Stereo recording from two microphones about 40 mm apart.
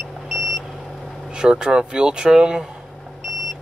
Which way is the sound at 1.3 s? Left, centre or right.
Right.